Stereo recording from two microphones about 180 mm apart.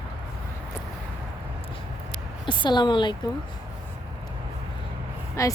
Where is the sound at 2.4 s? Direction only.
25° left (ahead or behind).